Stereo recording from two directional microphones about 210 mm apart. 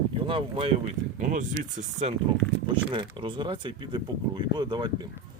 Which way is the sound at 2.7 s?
25° right (ahead or behind).